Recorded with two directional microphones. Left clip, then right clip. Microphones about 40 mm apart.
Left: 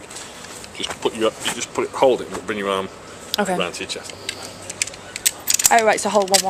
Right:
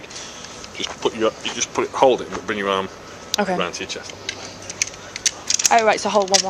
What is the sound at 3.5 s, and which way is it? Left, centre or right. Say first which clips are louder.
Speech: even; right.